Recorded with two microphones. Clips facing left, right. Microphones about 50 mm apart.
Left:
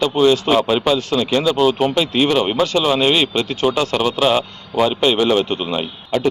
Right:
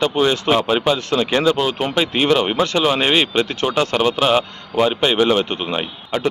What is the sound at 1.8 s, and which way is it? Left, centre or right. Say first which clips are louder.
Speech: left 2 dB; right.